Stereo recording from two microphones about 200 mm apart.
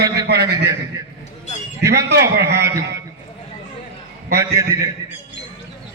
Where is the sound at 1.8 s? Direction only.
55° right (ahead or behind).